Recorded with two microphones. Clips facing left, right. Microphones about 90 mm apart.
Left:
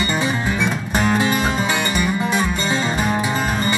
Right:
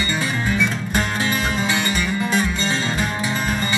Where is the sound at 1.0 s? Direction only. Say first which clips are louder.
Left 5 dB; 10° left (ahead or behind).